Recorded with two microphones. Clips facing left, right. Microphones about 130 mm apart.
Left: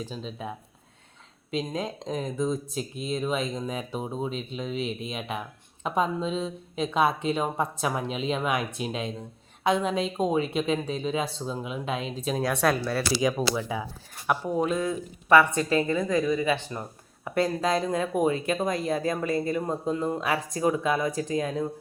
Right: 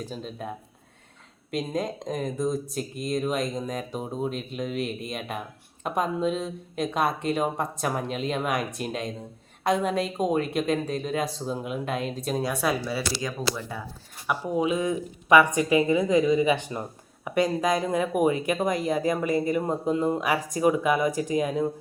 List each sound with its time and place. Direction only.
0.0 s speech: 5° right (ahead or behind)
14.3 s speech: 10° right (ahead or behind)